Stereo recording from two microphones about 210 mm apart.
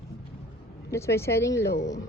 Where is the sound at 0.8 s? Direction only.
15° left (ahead or behind).